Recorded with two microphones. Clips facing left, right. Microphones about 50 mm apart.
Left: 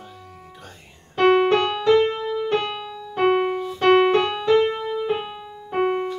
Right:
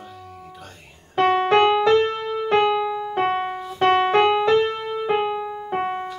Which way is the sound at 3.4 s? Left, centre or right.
Centre.